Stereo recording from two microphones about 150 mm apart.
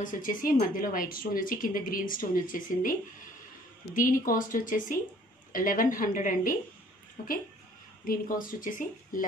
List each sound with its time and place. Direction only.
0.0 s a woman's voice: 65° left (ahead or behind)
8.0 s a woman's voice: 65° left (ahead or behind)